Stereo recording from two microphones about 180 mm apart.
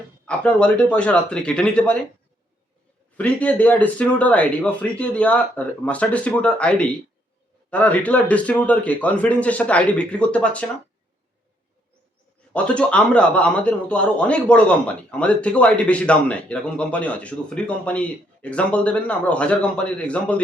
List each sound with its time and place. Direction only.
0.3 s speech: 5° left (ahead or behind)
3.2 s speech: 10° left (ahead or behind)
12.5 s speech: 5° left (ahead or behind)